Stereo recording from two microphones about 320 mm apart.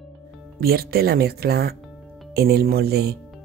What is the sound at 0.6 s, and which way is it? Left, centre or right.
Speech, right.